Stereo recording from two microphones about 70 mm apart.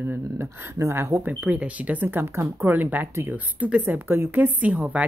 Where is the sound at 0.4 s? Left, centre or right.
Right.